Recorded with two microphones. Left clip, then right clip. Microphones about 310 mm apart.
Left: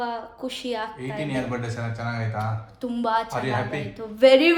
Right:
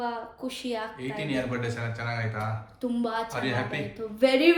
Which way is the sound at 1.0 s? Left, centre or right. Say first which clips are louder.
Left 2 dB; centre.